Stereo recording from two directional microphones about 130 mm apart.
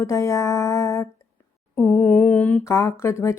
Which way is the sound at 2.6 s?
25° left (ahead or behind).